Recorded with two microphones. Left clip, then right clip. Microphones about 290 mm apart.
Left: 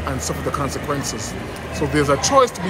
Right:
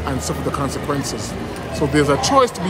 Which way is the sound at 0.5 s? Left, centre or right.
Centre.